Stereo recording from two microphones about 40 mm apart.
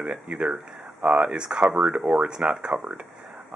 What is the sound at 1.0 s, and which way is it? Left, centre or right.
Speech, right.